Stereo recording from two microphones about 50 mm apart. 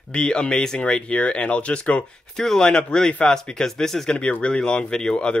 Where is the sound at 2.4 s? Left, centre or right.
Centre.